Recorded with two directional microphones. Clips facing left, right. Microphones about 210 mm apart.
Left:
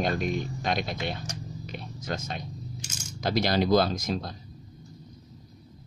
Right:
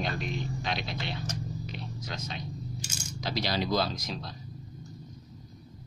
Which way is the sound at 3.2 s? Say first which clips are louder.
Left 6 dB; 50° left (ahead or behind).